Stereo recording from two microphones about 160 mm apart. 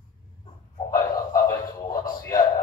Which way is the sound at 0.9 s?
20° left (ahead or behind).